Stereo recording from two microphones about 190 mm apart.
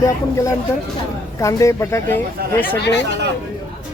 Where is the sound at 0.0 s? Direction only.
15° left (ahead or behind).